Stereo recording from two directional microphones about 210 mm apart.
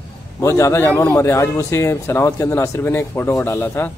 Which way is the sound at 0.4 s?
15° left (ahead or behind).